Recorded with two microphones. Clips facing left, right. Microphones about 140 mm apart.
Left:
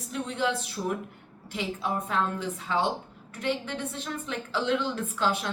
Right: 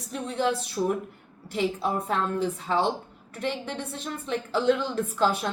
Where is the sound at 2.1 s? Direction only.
35° right (ahead or behind).